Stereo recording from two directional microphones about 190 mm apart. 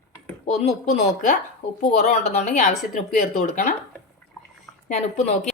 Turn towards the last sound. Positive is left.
turn(degrees=35)  # may be behind; listen again after turning